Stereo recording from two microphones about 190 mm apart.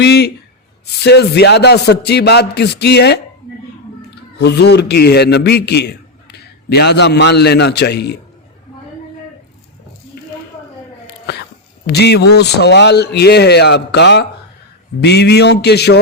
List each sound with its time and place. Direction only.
0.0 s a man's voice: 60° left (ahead or behind)
4.4 s a man's voice: 60° left (ahead or behind)
11.9 s a man's voice: 60° left (ahead or behind)